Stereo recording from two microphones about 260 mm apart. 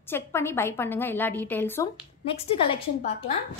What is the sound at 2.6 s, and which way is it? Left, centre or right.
Speech, left.